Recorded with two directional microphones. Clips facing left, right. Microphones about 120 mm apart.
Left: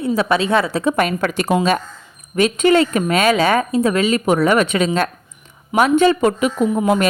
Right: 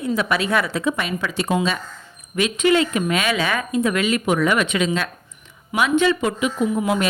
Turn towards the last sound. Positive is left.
turn(degrees=45)  # may be behind; listen again after turning